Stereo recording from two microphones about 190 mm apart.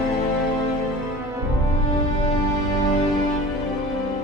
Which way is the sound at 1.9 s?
30° left (ahead or behind).